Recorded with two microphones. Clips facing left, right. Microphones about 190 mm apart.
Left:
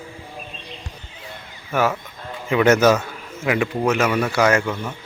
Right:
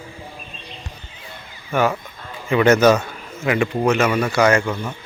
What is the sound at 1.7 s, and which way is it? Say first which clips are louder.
Speech: right 1 dB; 5° left (ahead or behind).